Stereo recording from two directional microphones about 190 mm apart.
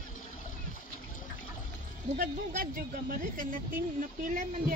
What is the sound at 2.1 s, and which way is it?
Speech, 50° right (ahead or behind).